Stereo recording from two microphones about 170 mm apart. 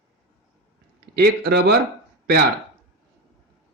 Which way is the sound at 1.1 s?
70° right (ahead or behind).